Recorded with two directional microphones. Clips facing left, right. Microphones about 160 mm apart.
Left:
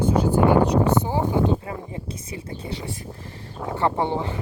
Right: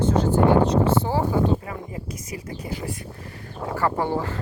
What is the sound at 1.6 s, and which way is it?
Speech, 30° left (ahead or behind).